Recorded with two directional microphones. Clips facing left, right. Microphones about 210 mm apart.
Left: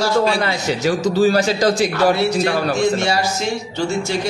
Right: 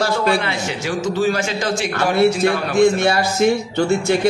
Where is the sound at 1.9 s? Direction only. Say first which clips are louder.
Even; 55° right (ahead or behind).